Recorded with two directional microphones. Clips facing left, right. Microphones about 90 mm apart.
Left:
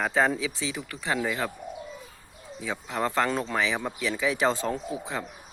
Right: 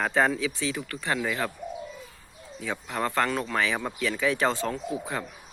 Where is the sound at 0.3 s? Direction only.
20° left (ahead or behind); by 1.5 s 5° left (ahead or behind).